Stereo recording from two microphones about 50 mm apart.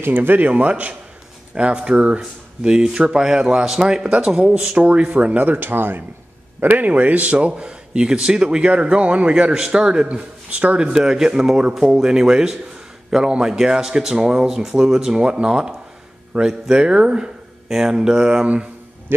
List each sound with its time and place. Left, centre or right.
0.0 s speech: right
0.5 s speech: right
6.6 s speech: right
10.9 s speech: centre